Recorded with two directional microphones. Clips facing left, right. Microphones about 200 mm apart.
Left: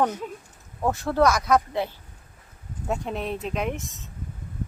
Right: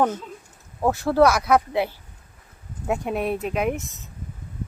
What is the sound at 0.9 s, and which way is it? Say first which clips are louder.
Speech: right 3 dB; 5° right (ahead or behind).